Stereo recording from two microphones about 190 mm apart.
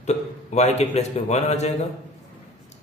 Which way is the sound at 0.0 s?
35° left (ahead or behind).